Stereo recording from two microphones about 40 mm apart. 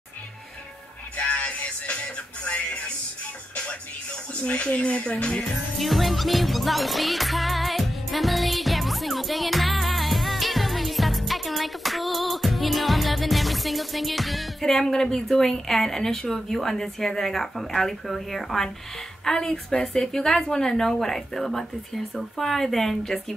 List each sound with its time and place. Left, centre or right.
1.1 s music: left
4.4 s speech: left
5.8 s music: centre
14.6 s speech: centre